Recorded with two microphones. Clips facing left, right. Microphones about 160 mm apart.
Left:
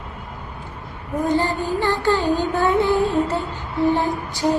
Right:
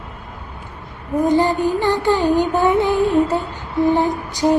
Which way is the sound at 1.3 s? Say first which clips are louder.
Right 4 dB; 15° right (ahead or behind).